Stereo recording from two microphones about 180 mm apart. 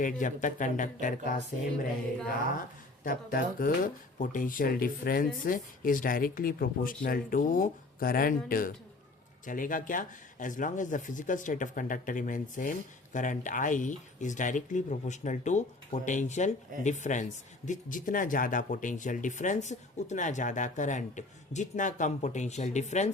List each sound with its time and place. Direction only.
0.0 s speech: 45° left (ahead or behind)
3.0 s speech: 50° left (ahead or behind)